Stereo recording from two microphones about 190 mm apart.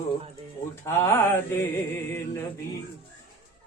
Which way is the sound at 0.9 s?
15° left (ahead or behind).